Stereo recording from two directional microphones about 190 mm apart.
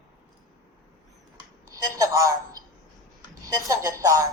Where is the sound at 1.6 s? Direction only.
20° right (ahead or behind).